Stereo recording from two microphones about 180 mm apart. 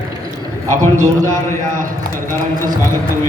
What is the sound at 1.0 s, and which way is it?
Speech, 15° right (ahead or behind).